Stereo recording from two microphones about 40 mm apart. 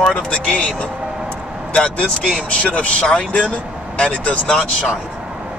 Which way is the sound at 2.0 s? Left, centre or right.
Left.